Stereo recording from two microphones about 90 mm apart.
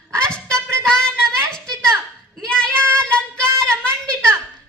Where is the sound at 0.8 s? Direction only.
10° left (ahead or behind).